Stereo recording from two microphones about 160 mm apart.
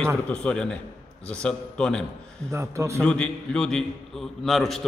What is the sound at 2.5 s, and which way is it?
Speech, 20° right (ahead or behind).